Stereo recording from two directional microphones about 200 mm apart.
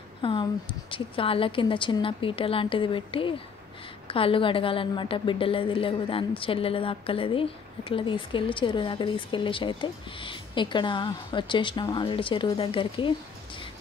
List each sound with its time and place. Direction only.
0.2 s speech: 25° left (ahead or behind)